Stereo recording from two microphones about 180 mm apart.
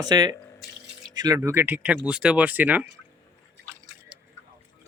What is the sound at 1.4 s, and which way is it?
Speech, 10° right (ahead or behind).